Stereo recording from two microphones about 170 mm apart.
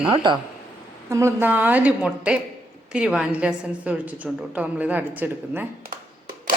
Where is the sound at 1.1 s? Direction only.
15° right (ahead or behind).